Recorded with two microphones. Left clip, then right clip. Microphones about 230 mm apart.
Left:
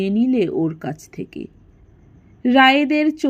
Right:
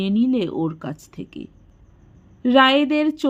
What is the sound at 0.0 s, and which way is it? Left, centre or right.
Speech, left.